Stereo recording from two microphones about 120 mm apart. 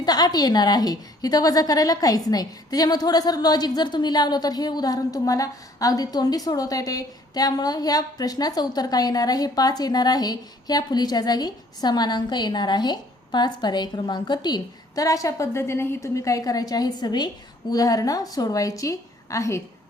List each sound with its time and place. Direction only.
0.0 s a woman's voice: 35° left (ahead or behind)